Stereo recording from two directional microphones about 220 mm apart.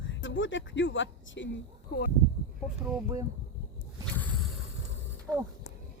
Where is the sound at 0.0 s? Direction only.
55° left (ahead or behind).